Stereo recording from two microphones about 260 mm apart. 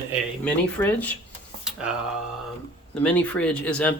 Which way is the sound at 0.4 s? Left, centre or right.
Centre.